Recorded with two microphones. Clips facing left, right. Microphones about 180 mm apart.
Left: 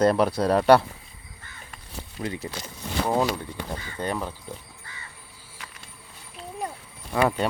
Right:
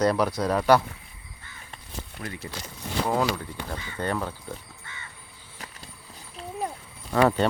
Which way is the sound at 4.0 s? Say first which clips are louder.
Right 1 dB; 10° left (ahead or behind).